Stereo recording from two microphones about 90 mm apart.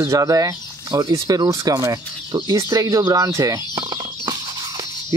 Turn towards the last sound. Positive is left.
turn(degrees=-45)  # may be behind; listen again after turning